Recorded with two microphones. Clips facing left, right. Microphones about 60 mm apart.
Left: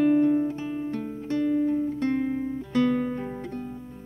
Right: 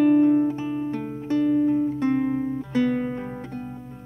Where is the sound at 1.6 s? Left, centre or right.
Centre.